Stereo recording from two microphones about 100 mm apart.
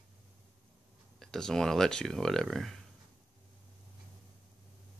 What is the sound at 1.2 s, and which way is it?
Speech, 5° left (ahead or behind).